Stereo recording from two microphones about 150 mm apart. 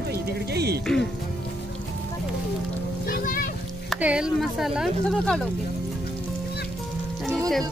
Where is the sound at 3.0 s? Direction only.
80° left.